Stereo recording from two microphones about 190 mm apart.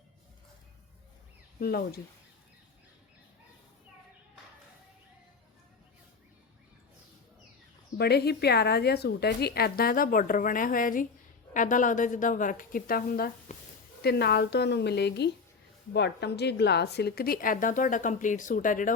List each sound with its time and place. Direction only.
1.5 s speech: 55° left (ahead or behind)
7.9 s a woman's voice: 60° left (ahead or behind)